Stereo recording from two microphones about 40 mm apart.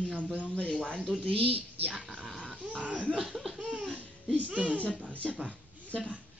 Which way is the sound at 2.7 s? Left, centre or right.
Right.